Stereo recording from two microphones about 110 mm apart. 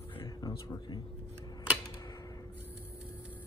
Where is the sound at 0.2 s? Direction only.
40° left (ahead or behind).